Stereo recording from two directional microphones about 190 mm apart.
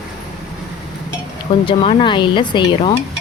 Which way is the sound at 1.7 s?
25° left (ahead or behind).